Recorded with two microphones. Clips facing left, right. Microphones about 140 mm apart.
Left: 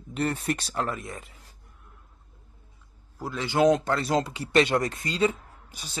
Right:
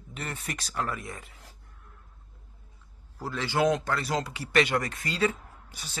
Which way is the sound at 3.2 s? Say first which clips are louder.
Left 4 dB; 15° left (ahead or behind).